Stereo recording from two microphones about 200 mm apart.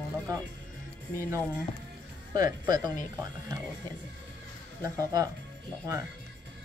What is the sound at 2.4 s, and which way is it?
Speech, 20° right (ahead or behind).